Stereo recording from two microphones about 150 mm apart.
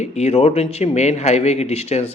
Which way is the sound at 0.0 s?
45° left (ahead or behind).